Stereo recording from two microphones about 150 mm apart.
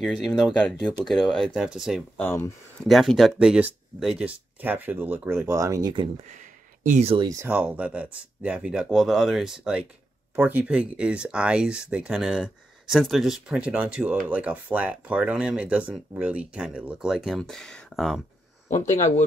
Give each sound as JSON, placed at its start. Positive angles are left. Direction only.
{"t": 0.0, "sound": "speech", "side_deg": 5}
{"t": 2.2, "sound": "speech", "side_deg": 15}
{"t": 2.8, "sound": "speech", "side_deg": 0}
{"t": 6.2, "sound": "a sound", "side_deg": -55}
{"t": 7.3, "sound": "speech", "side_deg": -10}
{"t": 18.7, "sound": "speech", "side_deg": 50}